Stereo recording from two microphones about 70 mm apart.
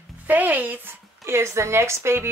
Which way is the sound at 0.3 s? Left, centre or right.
Right.